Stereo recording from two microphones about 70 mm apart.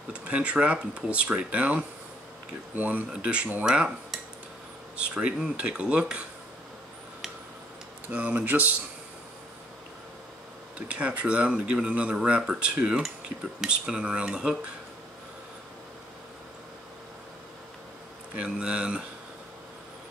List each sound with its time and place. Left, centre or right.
0.1 s speech: centre
4.9 s speech: centre
8.1 s speech: right
10.9 s speech: centre
18.3 s speech: centre